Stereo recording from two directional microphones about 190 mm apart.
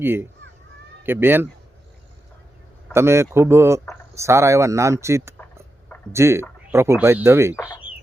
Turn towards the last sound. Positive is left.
turn(degrees=-10)  # may be behind; listen again after turning